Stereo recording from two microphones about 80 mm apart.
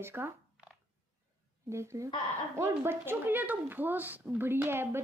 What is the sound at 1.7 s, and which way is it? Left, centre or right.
Speech, right.